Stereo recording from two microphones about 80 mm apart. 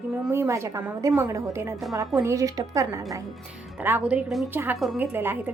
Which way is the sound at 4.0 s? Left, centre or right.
Centre.